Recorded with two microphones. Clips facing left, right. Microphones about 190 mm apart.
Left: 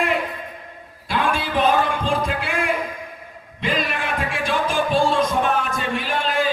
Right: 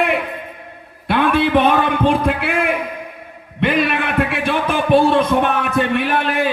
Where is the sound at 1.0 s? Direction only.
60° right (ahead or behind).